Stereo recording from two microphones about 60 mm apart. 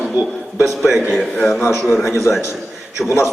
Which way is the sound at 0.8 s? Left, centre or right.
Centre.